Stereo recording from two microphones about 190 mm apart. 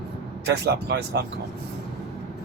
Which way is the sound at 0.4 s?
60° right (ahead or behind).